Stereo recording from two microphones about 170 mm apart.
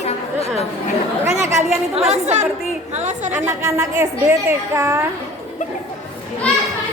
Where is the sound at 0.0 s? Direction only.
35° left (ahead or behind).